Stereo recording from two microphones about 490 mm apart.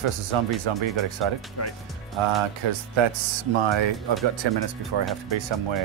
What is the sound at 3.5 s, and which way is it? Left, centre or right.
Speech, right.